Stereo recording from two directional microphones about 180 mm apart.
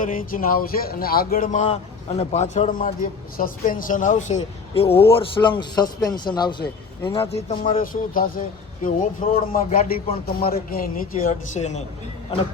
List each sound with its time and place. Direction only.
0.0 s a man's voice: 50° left (ahead or behind); by 7.8 s 35° left (ahead or behind)
7.8 s speech: 50° left (ahead or behind)